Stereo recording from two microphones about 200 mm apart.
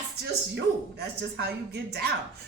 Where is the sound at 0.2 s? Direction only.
55° right (ahead or behind).